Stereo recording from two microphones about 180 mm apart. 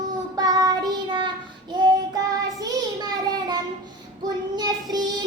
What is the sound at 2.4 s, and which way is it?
Child singing, 20° right (ahead or behind).